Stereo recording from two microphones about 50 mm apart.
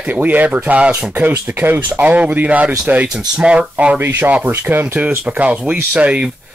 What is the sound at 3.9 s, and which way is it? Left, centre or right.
Speech, right.